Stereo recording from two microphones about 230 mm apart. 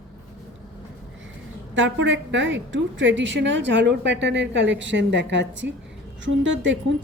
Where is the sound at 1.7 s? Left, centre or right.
Right.